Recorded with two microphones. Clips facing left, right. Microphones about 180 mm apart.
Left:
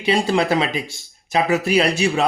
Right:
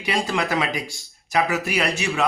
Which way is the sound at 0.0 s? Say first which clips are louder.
Left 6 dB; 25° left (ahead or behind).